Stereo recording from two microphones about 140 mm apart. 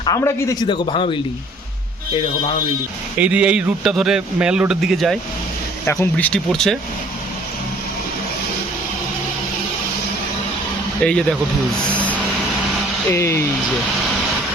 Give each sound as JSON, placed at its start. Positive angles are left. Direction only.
{"t": 0.0, "sound": "a man's voice", "side_deg": 25}
{"t": 0.7, "sound": "speech", "side_deg": 40}
{"t": 3.2, "sound": "a man's voice", "side_deg": -10}
{"t": 5.8, "sound": "speech", "side_deg": 20}
{"t": 11.0, "sound": "a man's voice", "side_deg": 5}
{"t": 13.1, "sound": "a man's voice", "side_deg": 20}